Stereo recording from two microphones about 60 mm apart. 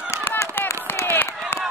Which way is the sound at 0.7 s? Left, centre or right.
Left.